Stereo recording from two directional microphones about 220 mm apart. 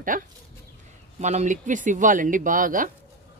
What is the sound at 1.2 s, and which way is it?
Speech, 30° right (ahead or behind).